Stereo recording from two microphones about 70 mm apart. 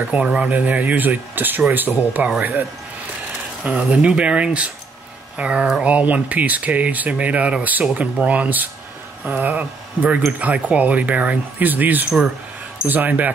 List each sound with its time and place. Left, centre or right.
0.1 s speech: centre
3.9 s speech: centre